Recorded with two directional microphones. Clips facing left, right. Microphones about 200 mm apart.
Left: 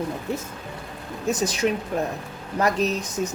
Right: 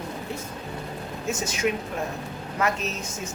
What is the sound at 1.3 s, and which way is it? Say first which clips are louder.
Speech: left 4 dB; 35° left (ahead or behind).